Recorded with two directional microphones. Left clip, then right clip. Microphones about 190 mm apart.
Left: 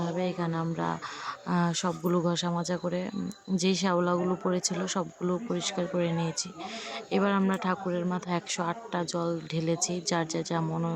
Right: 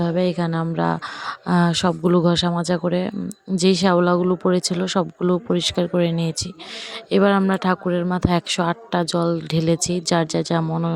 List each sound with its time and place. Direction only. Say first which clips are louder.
0.0 s speech: right 10 dB; 40° right (ahead or behind)